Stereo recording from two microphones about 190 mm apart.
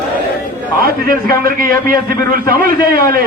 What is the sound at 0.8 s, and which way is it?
A man's voice, 50° right (ahead or behind).